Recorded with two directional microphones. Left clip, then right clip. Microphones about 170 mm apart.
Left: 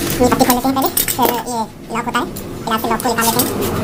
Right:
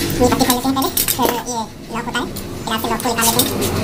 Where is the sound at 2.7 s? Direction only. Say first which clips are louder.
Left 3 dB; 20° left (ahead or behind).